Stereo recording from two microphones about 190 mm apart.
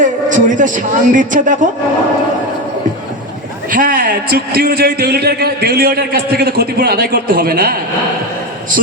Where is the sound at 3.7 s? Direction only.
45° right (ahead or behind).